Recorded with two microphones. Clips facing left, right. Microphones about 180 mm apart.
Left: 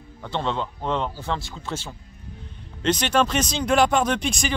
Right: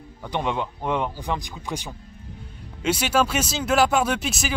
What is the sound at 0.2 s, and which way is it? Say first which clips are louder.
Speech: right 1 dB; 15° right (ahead or behind).